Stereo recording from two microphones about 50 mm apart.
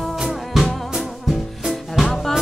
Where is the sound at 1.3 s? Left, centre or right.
Centre.